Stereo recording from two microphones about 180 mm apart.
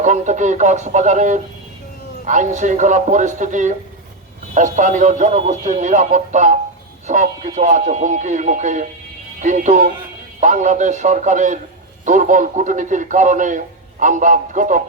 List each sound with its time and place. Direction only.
0.0 s a man's voice: 45° right (ahead or behind)